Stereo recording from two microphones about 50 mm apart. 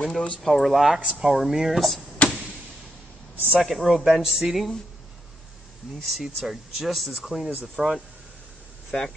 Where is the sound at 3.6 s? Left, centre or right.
Centre.